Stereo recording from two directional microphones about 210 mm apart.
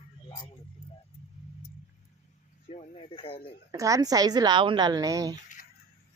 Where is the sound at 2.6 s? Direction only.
25° left (ahead or behind).